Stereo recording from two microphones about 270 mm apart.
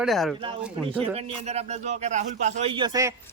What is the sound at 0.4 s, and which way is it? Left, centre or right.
Speech, centre.